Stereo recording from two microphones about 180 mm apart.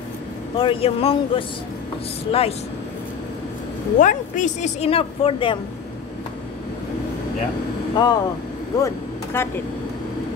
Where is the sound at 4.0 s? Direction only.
45° left (ahead or behind); by 5.5 s 30° left (ahead or behind).